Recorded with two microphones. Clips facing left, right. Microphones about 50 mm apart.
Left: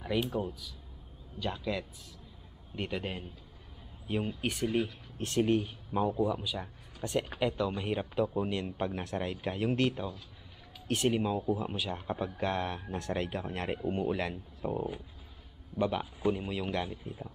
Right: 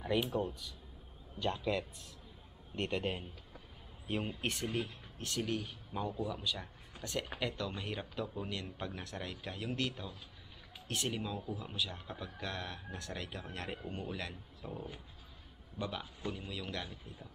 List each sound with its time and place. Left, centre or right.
0.0 s speech: centre
4.4 s speech: centre
4.8 s speech: left
15.8 s speech: left